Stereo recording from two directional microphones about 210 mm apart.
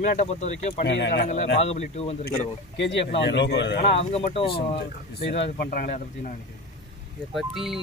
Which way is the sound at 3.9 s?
30° left (ahead or behind).